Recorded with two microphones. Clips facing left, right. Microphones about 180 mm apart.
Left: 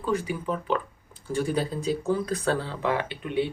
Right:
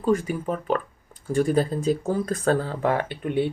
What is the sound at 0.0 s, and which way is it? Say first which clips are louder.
Speech: right 5 dB; 45° right (ahead or behind).